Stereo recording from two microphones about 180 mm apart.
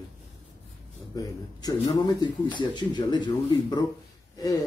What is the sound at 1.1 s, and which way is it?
Speech, 20° left (ahead or behind).